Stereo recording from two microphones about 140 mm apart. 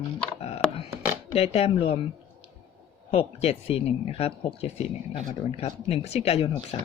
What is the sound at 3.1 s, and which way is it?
Speech, 45° left (ahead or behind).